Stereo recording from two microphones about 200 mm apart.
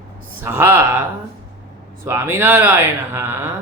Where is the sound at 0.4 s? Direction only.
10° right (ahead or behind).